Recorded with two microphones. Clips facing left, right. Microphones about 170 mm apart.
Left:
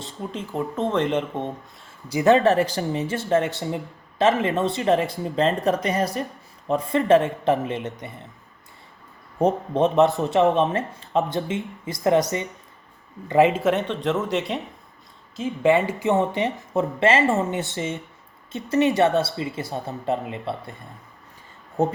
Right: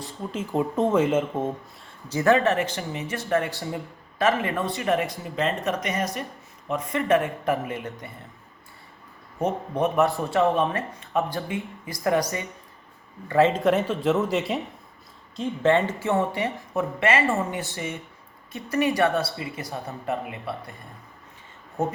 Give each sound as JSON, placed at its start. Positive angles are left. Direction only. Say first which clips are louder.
{"t": 0.2, "sound": "speech", "louder": "even", "side_deg": 0}
{"t": 0.5, "sound": "speech", "louder": "right 3 dB", "side_deg": -15}
{"t": 2.0, "sound": "a man's voice", "louder": "left 3 dB", "side_deg": 15}
{"t": 2.3, "sound": "speech", "louder": "left 4 dB", "side_deg": 35}
{"t": 9.4, "sound": "speech", "louder": "left 5 dB", "side_deg": 35}
{"t": 9.8, "sound": "speech", "louder": "left 4 dB", "side_deg": 20}
{"t": 13.2, "sound": "a man's voice", "louder": "left 2 dB", "side_deg": 20}
{"t": 13.5, "sound": "speech", "louder": "even", "side_deg": 0}